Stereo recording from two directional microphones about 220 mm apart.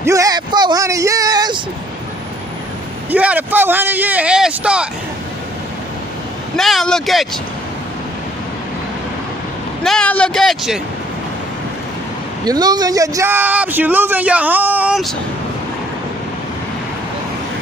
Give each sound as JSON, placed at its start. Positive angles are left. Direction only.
{"t": 0.0, "sound": "speech", "side_deg": -15}
{"t": 3.1, "sound": "speech", "side_deg": -5}
{"t": 6.5, "sound": "a man's voice", "side_deg": 0}
{"t": 9.8, "sound": "a man's voice", "side_deg": 5}
{"t": 12.4, "sound": "speech", "side_deg": -20}